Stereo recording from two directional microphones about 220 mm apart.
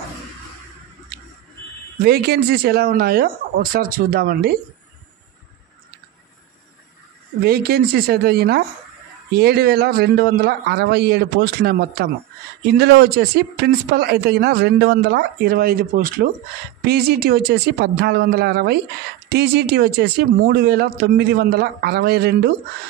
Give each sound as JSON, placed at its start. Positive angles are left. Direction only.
{"t": 2.0, "sound": "speech", "side_deg": -45}
{"t": 7.4, "sound": "speech", "side_deg": -45}